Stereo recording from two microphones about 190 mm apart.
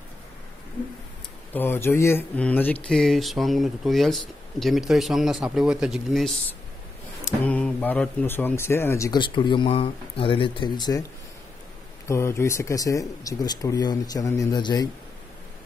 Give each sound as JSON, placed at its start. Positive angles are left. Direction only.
{"t": 1.5, "sound": "speech", "side_deg": 10}
{"t": 7.4, "sound": "speech", "side_deg": 10}
{"t": 12.1, "sound": "speech", "side_deg": 15}